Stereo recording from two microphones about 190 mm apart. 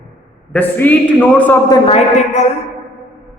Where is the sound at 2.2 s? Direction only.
40° left (ahead or behind).